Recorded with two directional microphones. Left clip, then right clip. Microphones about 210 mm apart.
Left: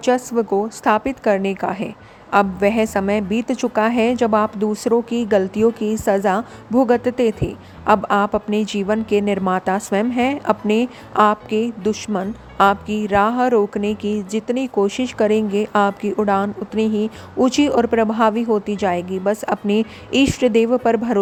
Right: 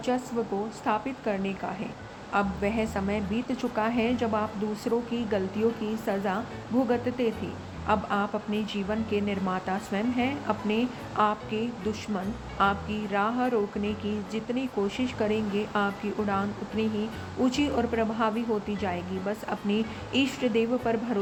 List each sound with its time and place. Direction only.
0.0 s a woman's voice: 50° left (ahead or behind)